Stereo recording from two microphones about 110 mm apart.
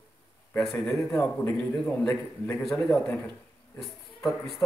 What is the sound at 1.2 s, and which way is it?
A man's voice, 10° left (ahead or behind).